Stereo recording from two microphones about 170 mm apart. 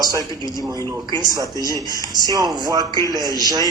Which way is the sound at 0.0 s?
20° right (ahead or behind).